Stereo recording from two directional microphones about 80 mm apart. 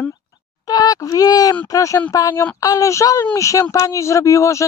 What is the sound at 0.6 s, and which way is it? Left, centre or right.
Speech, left.